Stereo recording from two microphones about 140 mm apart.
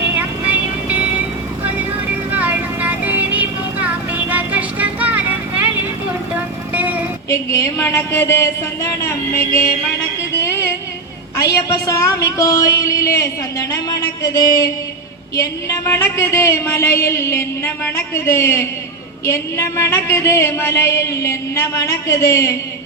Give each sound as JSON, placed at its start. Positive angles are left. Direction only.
{"t": 0.2, "sound": "vehicle", "side_deg": -10}
{"t": 2.3, "sound": "vehicle", "side_deg": -10}
{"t": 7.3, "sound": "a woman's voice", "side_deg": 20}
{"t": 10.4, "sound": "music", "side_deg": 20}
{"t": 11.3, "sound": "a woman's voice", "side_deg": 25}